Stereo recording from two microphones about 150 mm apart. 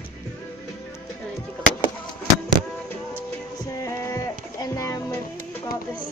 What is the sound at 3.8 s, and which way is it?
Music, 20° left (ahead or behind).